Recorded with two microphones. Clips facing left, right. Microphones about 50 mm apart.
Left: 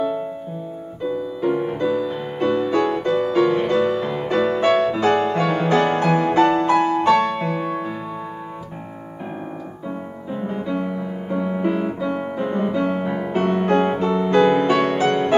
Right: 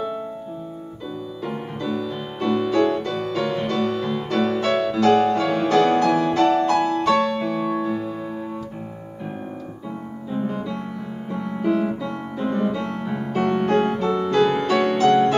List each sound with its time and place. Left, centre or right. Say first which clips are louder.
1.8 s music: left 5 dB; centre
10.3 s music: left 2 dB; left